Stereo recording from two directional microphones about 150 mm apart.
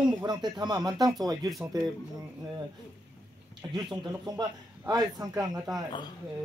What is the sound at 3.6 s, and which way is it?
Speech, 30° right (ahead or behind).